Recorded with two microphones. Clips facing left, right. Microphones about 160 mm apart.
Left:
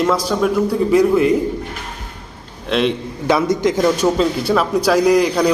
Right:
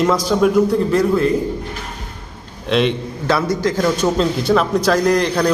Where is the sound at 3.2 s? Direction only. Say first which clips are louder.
Left 2 dB; 20° left (ahead or behind).